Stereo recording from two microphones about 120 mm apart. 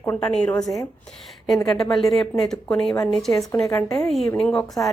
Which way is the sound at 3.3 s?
25° left (ahead or behind).